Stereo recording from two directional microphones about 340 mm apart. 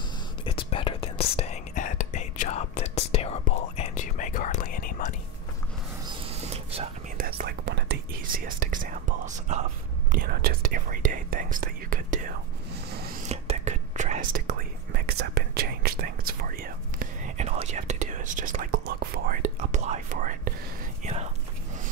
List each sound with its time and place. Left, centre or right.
0.5 s whispering: centre
6.0 s whispering: centre